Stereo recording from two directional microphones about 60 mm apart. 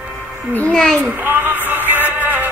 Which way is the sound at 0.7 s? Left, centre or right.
Centre.